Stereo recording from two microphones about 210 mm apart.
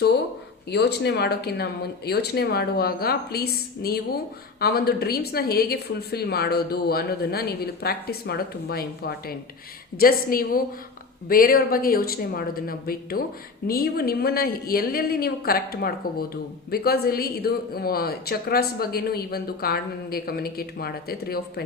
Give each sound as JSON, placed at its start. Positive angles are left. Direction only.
{"t": 0.7, "sound": "speech", "side_deg": 50}